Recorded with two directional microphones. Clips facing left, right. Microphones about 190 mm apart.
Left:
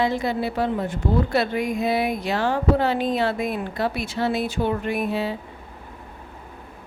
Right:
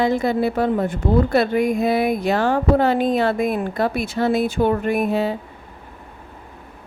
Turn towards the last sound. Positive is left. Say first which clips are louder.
# right 5 dB
turn(degrees=-50)  # may be behind; listen again after turning